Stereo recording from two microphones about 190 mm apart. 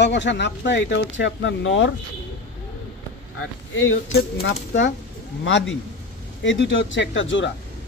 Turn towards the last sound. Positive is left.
turn(degrees=75)  # may be behind; listen again after turning